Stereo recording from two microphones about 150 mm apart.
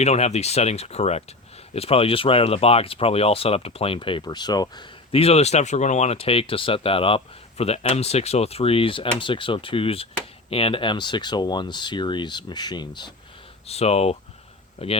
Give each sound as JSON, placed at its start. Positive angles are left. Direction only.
{"t": 0.0, "sound": "speech", "side_deg": 45}
{"t": 13.7, "sound": "speech", "side_deg": 45}